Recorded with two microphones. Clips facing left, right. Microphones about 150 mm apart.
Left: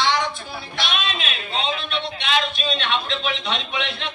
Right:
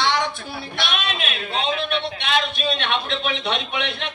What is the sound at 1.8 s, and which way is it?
A man's voice, 60° right (ahead or behind).